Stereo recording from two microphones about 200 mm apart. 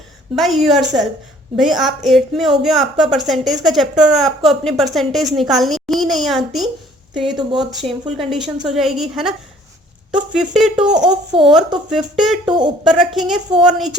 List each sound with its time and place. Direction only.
0.3 s a woman's voice: centre (ahead or behind)
7.3 s speech: 20° right (ahead or behind)
7.7 s a woman's voice: centre (ahead or behind)
10.3 s a woman's voice: 5° right (ahead or behind)
10.9 s speech: 20° right (ahead or behind)
11.9 s a woman's voice: 5° right (ahead or behind)
12.5 s speech: 20° right (ahead or behind)
12.8 s a woman's voice: centre (ahead or behind)